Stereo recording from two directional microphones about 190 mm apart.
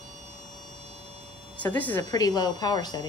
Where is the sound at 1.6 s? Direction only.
10° left (ahead or behind).